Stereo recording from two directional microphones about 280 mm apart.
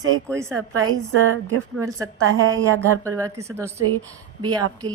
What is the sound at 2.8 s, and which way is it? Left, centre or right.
Speech, centre.